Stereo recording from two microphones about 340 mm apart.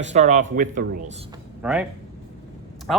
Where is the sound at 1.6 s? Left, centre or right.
Centre.